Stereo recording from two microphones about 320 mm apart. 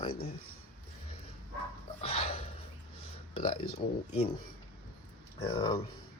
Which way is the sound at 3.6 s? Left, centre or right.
Left.